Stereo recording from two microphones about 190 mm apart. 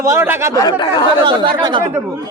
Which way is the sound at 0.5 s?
20° left (ahead or behind).